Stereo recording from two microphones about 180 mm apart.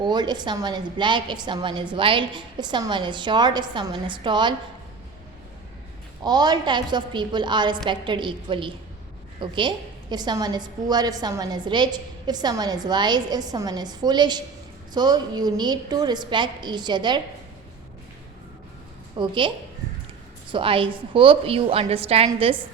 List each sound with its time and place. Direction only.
0.0 s a woman's voice: 25° right (ahead or behind)
6.2 s a woman's voice: 25° right (ahead or behind)
19.1 s a woman's voice: 25° right (ahead or behind)
20.5 s a woman's voice: 30° right (ahead or behind)